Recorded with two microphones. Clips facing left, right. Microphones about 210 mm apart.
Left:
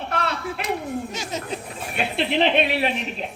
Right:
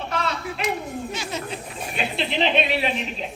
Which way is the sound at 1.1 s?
40° left (ahead or behind).